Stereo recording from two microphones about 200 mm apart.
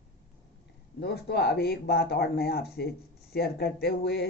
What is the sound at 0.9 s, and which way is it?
Speech, 55° left (ahead or behind).